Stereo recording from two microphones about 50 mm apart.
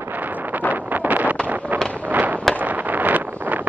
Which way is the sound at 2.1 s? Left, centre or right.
Right.